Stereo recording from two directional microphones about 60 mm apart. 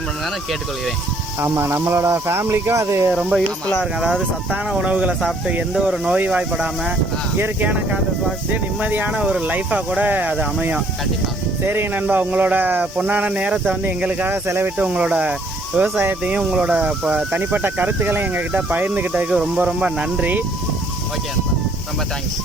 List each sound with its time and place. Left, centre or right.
1.4 s speech: right
3.2 s speech: centre
5.8 s speech: centre
6.1 s speech: right
7.3 s speech: right
8.8 s speech: right
9.1 s speech: centre
9.4 s speech: right
11.6 s speech: right
12.0 s speech: right
14.4 s speech: right
14.8 s speech: right
17.3 s speech: right
19.3 s speech: centre